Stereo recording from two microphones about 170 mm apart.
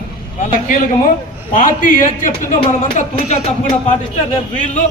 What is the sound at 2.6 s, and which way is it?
Speech, 35° left (ahead or behind).